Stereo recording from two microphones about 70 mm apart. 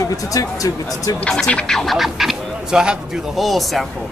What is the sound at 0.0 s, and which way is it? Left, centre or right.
Speech, left.